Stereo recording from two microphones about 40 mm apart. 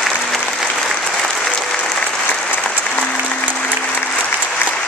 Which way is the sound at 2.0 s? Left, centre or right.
Left.